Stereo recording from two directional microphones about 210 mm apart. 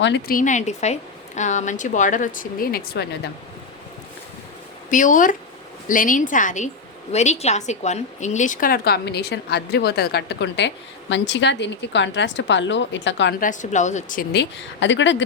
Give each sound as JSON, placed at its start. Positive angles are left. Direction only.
{"t": 0.0, "sound": "speech", "side_deg": 50}
{"t": 4.9, "sound": "a woman's voice", "side_deg": 40}
{"t": 13.4, "sound": "speech", "side_deg": 35}
{"t": 14.8, "sound": "a woman's voice", "side_deg": 60}